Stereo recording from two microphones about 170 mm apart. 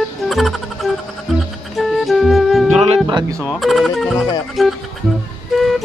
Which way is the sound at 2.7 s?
35° right (ahead or behind).